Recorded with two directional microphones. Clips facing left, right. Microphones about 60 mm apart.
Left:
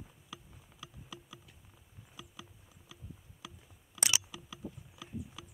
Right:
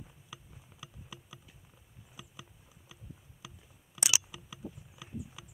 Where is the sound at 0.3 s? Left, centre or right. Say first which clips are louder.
Even; centre.